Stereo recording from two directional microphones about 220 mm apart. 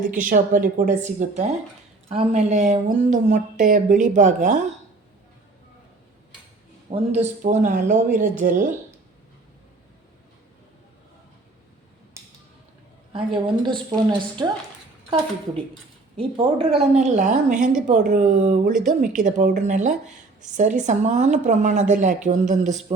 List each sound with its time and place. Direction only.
0.1 s speech: 35° right (ahead or behind)
6.9 s speech: 30° right (ahead or behind)
13.1 s a woman's voice: 20° right (ahead or behind)
16.1 s a woman's voice: 25° right (ahead or behind)